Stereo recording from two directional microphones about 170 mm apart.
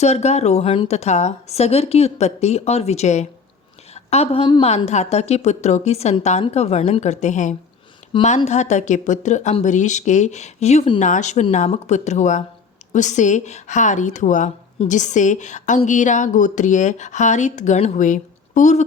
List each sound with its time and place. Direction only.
0.0 s a woman's voice: 40° left (ahead or behind)
8.1 s speech: 30° left (ahead or behind)
8.4 s a woman's voice: 45° left (ahead or behind)